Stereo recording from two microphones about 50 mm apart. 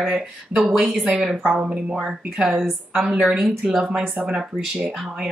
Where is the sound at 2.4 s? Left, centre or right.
Centre.